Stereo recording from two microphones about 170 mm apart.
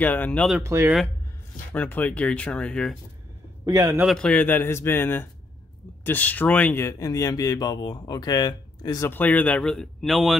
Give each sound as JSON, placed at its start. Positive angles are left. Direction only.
{"t": 0.0, "sound": "speech", "side_deg": 10}
{"t": 0.6, "sound": "speech", "side_deg": -15}
{"t": 1.7, "sound": "speech", "side_deg": 10}
{"t": 3.6, "sound": "a man's voice", "side_deg": -20}
{"t": 4.0, "sound": "speech", "side_deg": 5}